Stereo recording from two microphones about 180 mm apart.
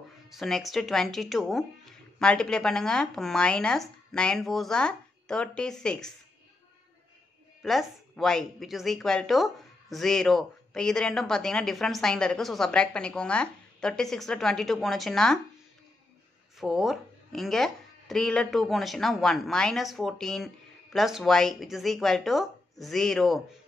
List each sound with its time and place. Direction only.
0.3 s speech: centre (ahead or behind)
7.6 s speech: centre (ahead or behind)
16.5 s speech: centre (ahead or behind)